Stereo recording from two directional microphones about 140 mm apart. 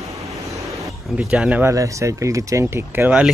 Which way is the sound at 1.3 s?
10° right (ahead or behind).